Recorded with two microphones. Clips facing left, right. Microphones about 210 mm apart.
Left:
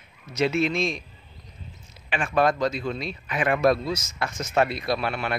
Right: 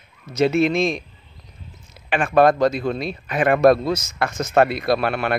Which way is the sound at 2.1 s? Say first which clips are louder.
Right 7 dB; 60° right (ahead or behind).